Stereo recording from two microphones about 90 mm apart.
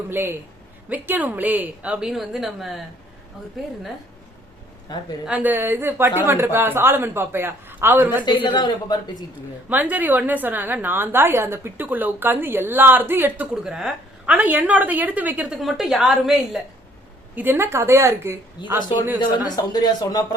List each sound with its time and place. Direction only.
0.1 s a woman's voice: 25° right (ahead or behind); by 3.7 s centre (ahead or behind)
5.2 s a woman's voice: 15° right (ahead or behind)
8.2 s a man's voice: 60° left (ahead or behind)
9.6 s a woman's voice: 15° right (ahead or behind)
13.7 s speech: 5° right (ahead or behind)
14.3 s a woman's voice: 15° right (ahead or behind)
15.5 s a woman's voice: 5° right (ahead or behind)
17.3 s a woman's voice: 25° right (ahead or behind)
19.2 s a man's voice: 45° left (ahead or behind)